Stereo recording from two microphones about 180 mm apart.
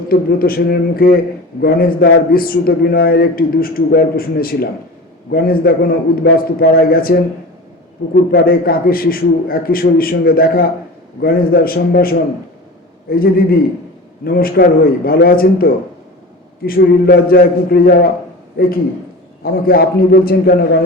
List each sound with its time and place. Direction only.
0.1 s a man's voice: 55° left (ahead or behind)